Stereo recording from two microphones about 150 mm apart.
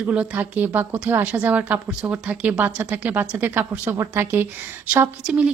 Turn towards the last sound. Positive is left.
turn(degrees=-10)  # may be behind; listen again after turning